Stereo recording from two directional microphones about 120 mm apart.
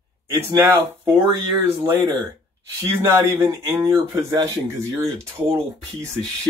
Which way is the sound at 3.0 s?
25° right (ahead or behind).